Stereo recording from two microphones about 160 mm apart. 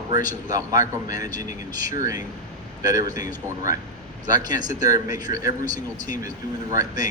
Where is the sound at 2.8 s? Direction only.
20° right (ahead or behind).